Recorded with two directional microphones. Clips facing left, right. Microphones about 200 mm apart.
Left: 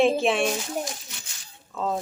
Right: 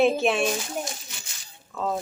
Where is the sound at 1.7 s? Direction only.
Centre (ahead or behind).